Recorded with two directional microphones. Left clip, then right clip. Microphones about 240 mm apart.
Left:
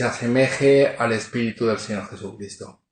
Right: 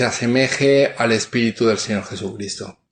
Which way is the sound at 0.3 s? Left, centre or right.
Right.